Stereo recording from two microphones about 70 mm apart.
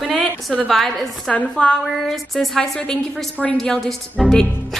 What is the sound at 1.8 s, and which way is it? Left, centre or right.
Speech, centre.